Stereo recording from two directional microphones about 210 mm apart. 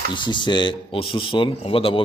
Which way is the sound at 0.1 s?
20° left (ahead or behind).